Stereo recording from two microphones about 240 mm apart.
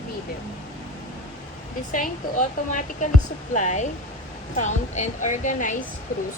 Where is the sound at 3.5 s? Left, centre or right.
Left.